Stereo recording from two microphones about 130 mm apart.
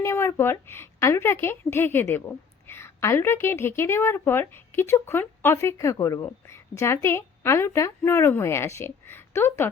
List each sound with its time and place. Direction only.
0.0 s a woman's voice: 20° left (ahead or behind)